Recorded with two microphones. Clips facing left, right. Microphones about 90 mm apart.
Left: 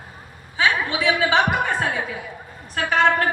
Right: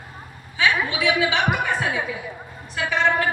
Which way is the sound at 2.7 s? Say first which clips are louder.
Left 2 dB; 45° left (ahead or behind).